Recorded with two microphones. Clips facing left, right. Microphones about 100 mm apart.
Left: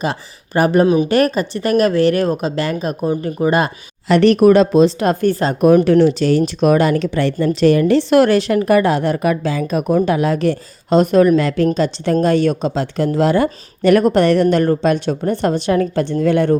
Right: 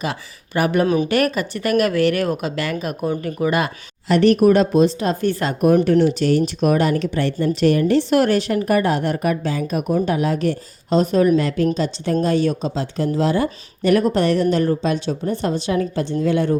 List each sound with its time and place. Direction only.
0.0 s speech: 35° left (ahead or behind)
4.1 s speech: 85° left
5.5 s speech: 90° left; by 16.6 s 60° left (ahead or behind)